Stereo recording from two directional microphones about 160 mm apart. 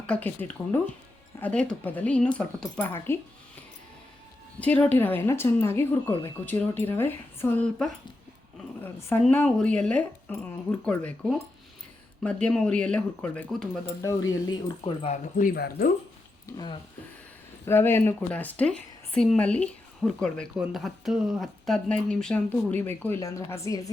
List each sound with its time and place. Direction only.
0.1 s a woman's voice: 10° left (ahead or behind)
4.6 s a woman's voice: 10° left (ahead or behind)
12.5 s a woman's voice: 5° left (ahead or behind)
14.0 s speech: 20° left (ahead or behind)
15.1 s speech: 55° left (ahead or behind)
16.5 s speech: 25° left (ahead or behind)
17.7 s a woman's voice: 15° left (ahead or behind)